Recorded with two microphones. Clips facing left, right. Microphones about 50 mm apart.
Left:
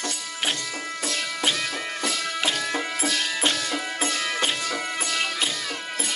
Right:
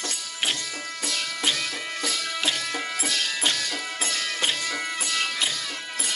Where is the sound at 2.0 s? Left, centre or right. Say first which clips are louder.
Left 2 dB; left.